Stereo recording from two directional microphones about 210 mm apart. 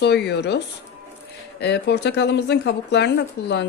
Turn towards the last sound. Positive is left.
turn(degrees=55)  # may be behind; listen again after turning